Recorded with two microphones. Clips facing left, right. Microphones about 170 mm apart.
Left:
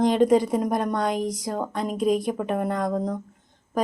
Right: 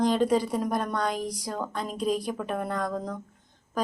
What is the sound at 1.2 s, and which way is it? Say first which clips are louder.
Speech: left 5 dB; 20° left (ahead or behind).